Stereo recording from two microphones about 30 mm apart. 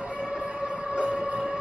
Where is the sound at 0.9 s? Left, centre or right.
Right.